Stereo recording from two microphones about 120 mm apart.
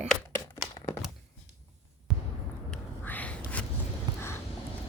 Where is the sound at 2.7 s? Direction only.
10° left (ahead or behind).